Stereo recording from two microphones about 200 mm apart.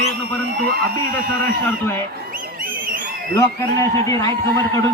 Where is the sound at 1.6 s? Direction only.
10° left (ahead or behind).